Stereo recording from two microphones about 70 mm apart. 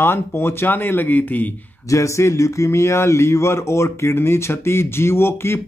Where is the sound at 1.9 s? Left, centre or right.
Left.